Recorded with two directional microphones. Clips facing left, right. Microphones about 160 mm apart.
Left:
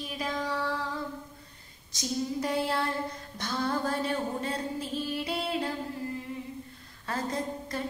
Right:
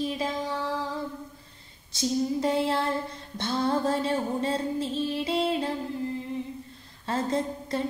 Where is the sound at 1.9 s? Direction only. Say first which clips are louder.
Right 5 dB; 25° right (ahead or behind).